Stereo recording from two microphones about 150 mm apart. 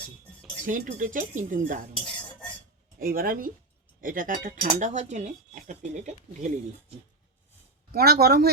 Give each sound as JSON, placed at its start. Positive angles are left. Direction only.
{"t": 0.6, "sound": "speech", "side_deg": -60}
{"t": 2.1, "sound": "cutlery", "side_deg": 10}
{"t": 3.0, "sound": "speech", "side_deg": -70}
{"t": 7.9, "sound": "speech", "side_deg": -90}